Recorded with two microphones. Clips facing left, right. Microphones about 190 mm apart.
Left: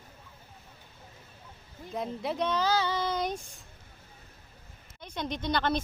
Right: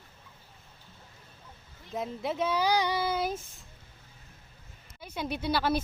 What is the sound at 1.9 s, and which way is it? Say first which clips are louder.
Speech: even; centre (ahead or behind).